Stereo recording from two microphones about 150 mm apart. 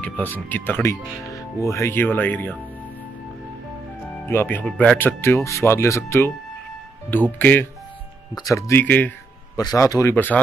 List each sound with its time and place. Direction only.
0.0 s speech: 10° left (ahead or behind)
4.1 s speech: 15° left (ahead or behind)
9.6 s speech: 25° left (ahead or behind)
10.1 s speech: 10° left (ahead or behind)